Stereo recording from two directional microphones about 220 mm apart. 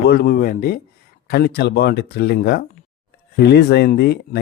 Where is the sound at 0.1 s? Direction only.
45° left (ahead or behind).